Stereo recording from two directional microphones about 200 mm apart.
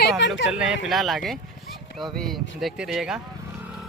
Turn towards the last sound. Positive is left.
turn(degrees=0)  # may be behind; listen again after turning